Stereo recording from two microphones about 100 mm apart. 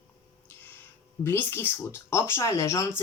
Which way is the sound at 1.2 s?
20° left (ahead or behind).